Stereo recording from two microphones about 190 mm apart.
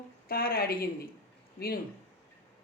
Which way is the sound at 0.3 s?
50° left (ahead or behind).